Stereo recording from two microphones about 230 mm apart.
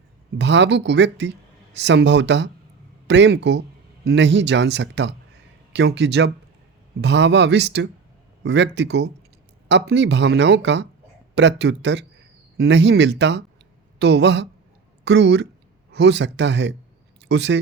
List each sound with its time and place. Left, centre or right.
0.3 s speech: right